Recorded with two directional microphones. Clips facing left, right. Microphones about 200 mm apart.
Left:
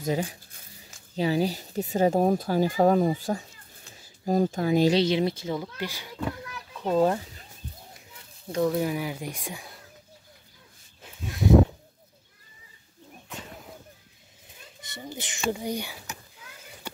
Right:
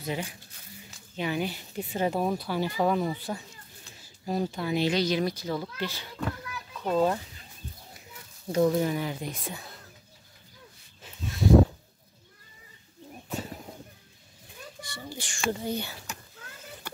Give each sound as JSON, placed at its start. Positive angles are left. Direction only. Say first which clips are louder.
{"t": 0.0, "sound": "speech", "louder": "left 6 dB", "side_deg": 40}
{"t": 4.9, "sound": "a child's voice", "louder": "left 3 dB", "side_deg": 25}
{"t": 8.5, "sound": "speech", "louder": "right 1 dB", "side_deg": -5}
{"t": 14.8, "sound": "a child's voice", "louder": "left 3 dB", "side_deg": 20}